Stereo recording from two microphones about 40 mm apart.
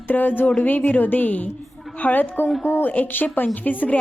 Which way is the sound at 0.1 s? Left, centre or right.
Left.